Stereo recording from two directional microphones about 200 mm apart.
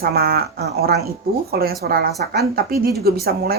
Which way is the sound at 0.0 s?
50° right (ahead or behind).